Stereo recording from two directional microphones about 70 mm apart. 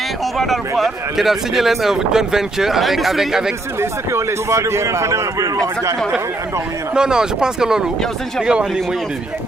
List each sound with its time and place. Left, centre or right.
0.3 s speech: centre
3.8 s a man's voice: right
6.9 s speech: centre